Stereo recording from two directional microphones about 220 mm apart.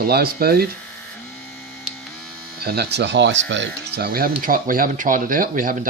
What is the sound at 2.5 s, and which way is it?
Speech, 45° right (ahead or behind).